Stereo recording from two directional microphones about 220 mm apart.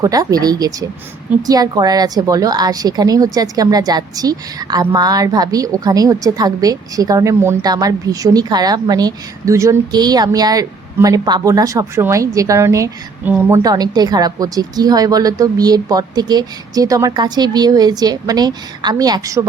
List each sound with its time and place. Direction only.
0.0 s a woman's voice: 15° right (ahead or behind)